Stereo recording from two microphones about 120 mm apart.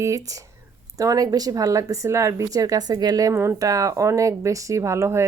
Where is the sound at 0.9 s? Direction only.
30° right (ahead or behind).